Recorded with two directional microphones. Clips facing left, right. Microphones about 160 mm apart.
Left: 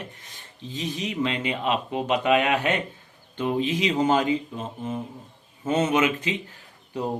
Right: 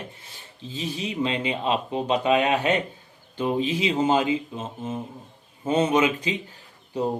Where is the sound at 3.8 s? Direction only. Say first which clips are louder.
Even; 25° right (ahead or behind).